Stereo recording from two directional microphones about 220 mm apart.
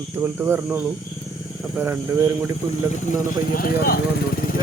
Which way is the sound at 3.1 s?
40° left (ahead or behind).